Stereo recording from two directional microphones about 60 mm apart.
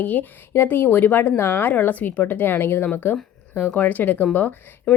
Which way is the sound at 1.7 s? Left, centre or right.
Left.